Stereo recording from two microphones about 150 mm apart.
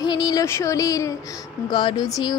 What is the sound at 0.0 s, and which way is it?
A woman's voice, 30° left (ahead or behind).